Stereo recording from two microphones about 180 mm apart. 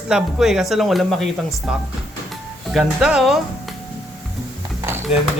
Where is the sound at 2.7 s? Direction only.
Centre (ahead or behind).